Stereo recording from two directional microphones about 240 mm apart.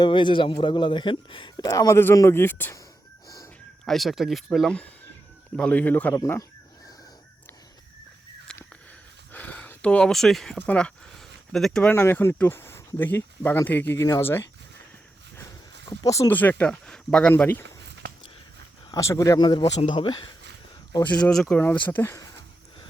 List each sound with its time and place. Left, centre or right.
0.0 s speech: centre
3.2 s a sound: centre
3.8 s speech: centre
8.5 s a sound: centre
10.7 s speech: centre
15.9 s speech: centre
18.9 s speech: centre